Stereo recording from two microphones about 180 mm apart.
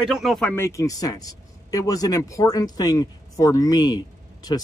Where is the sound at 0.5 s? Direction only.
15° left (ahead or behind).